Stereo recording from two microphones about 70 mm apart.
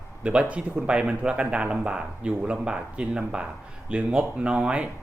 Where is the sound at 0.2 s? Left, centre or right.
Centre.